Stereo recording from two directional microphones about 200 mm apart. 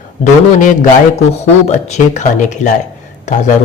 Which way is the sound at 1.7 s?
35° left (ahead or behind).